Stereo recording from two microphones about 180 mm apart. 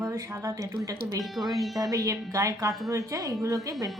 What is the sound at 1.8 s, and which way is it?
A woman's voice, 20° right (ahead or behind).